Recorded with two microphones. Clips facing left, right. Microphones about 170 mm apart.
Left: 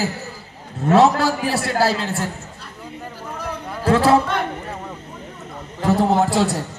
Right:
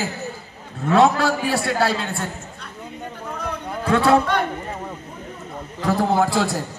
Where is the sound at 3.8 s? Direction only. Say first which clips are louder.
Left 2 dB; 30° left (ahead or behind).